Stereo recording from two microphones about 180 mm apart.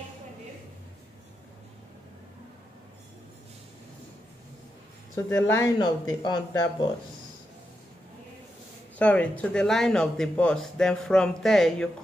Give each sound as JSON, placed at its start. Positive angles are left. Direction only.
{"t": 5.1, "sound": "speech", "side_deg": 15}
{"t": 8.9, "sound": "speech", "side_deg": 5}